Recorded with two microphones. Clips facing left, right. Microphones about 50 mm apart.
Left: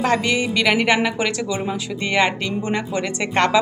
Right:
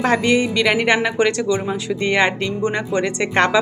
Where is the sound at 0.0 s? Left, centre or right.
Centre.